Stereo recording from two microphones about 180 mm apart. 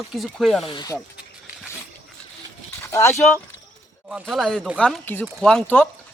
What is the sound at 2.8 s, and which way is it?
Speech, 15° left (ahead or behind).